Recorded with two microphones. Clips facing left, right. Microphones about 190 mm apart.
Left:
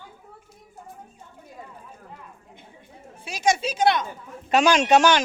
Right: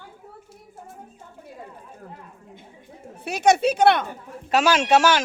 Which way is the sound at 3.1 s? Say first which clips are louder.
Right 4 dB; 60° right (ahead or behind).